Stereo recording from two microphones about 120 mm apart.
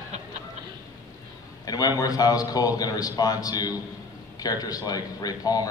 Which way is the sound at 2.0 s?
30° left (ahead or behind).